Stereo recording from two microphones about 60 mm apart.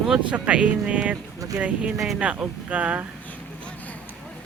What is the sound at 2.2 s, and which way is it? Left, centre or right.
Speech, right.